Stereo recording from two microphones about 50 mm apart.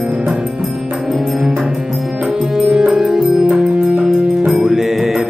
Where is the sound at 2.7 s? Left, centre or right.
Centre.